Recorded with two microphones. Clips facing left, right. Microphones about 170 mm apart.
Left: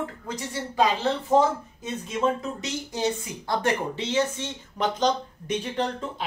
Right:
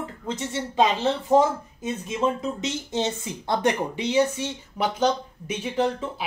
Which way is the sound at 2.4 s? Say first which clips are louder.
Right 3 dB; 25° right (ahead or behind).